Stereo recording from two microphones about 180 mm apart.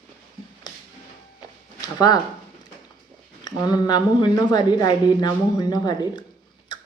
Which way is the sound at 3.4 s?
20° left (ahead or behind).